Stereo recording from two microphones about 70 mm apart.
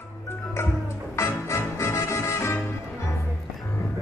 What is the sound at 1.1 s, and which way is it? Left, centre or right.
Music, left.